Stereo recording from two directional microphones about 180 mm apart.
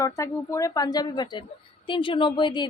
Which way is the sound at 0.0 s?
15° left (ahead or behind).